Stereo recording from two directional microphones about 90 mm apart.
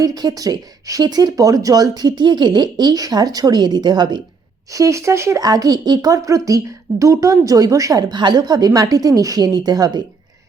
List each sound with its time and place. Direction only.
0.0 s speech: 45° right (ahead or behind)
4.7 s a woman's voice: 35° right (ahead or behind)
5.4 s a woman's voice: 45° right (ahead or behind)
8.1 s speech: 55° right (ahead or behind)